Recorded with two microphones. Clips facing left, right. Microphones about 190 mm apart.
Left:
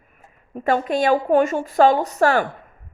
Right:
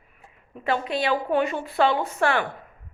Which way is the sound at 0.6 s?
45° left (ahead or behind).